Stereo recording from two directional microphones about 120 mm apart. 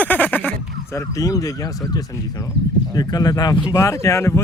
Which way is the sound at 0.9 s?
30° left (ahead or behind).